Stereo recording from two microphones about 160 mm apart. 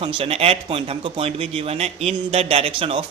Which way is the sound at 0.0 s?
40° right (ahead or behind).